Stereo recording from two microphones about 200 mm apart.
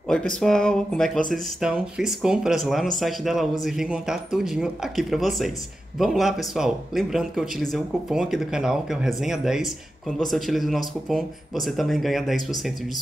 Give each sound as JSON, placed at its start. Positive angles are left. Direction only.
{"t": 0.1, "sound": "speech", "side_deg": 5}